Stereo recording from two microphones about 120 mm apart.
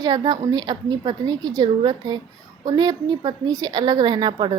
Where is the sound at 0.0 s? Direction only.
35° right (ahead or behind).